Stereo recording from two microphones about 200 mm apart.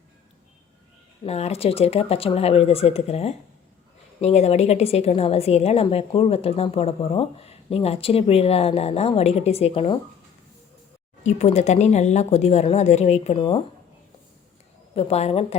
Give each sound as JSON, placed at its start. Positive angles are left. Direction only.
{"t": 1.2, "sound": "a woman's voice", "side_deg": 30}
{"t": 11.2, "sound": "a woman's voice", "side_deg": 35}
{"t": 14.9, "sound": "a woman's voice", "side_deg": 30}